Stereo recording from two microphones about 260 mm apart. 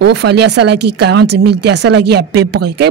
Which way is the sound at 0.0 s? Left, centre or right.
Right.